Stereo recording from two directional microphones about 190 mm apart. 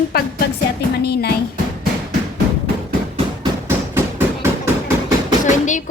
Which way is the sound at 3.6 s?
10° right (ahead or behind).